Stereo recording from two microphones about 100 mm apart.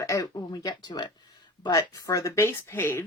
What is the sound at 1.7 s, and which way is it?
Speech, 35° left (ahead or behind).